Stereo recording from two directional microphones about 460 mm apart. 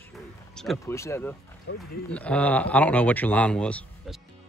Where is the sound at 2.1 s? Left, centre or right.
Centre.